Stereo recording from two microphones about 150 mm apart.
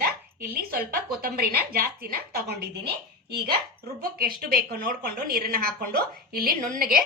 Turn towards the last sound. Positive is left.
turn(degrees=-75)  # may be behind; listen again after turning